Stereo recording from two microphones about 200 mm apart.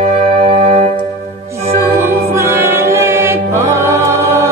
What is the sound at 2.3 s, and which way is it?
Music, 15° right (ahead or behind).